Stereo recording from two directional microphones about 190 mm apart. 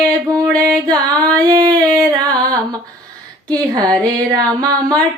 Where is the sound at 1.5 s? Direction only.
20° right (ahead or behind).